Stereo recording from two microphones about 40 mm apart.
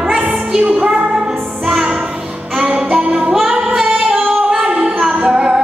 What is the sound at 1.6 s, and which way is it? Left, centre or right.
Music, centre.